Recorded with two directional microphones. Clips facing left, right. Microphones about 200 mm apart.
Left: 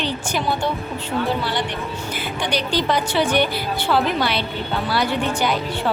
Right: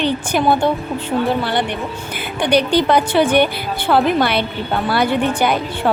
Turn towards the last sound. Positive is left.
turn(degrees=-55)  # may be behind; listen again after turning